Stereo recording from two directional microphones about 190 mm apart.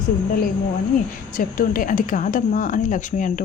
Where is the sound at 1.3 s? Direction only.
45° left (ahead or behind).